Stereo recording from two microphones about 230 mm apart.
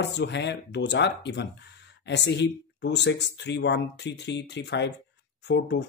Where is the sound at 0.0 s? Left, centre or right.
Left.